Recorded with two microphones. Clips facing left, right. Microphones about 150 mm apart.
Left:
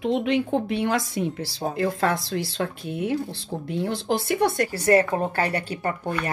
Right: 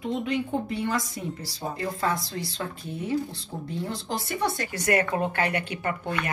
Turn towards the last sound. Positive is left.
turn(degrees=35)  # may be behind; listen again after turning